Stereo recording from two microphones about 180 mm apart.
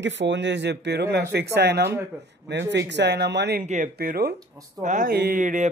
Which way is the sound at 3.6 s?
45° right (ahead or behind).